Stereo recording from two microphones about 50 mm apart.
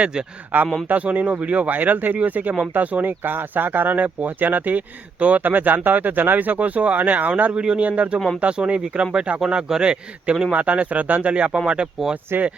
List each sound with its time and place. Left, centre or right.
0.0 s speech: centre
0.5 s speech: right
12.3 s speech: right